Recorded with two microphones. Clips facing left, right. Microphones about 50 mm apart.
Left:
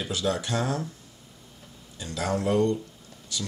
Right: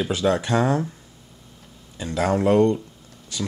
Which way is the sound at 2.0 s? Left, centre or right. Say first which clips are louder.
Right 7 dB; right.